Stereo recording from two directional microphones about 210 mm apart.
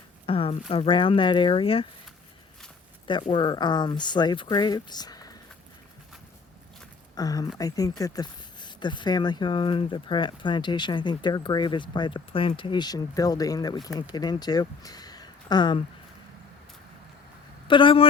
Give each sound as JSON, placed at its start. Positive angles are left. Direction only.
{"t": 0.3, "sound": "speech", "side_deg": 25}
{"t": 3.1, "sound": "speech", "side_deg": 25}
{"t": 7.2, "sound": "speech", "side_deg": 15}
{"t": 17.7, "sound": "speech", "side_deg": 25}